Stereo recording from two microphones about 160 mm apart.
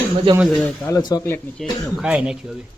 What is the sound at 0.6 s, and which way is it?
Speech, 20° left (ahead or behind).